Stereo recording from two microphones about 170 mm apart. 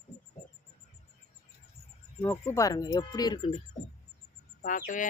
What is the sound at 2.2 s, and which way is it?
Speech, 10° left (ahead or behind).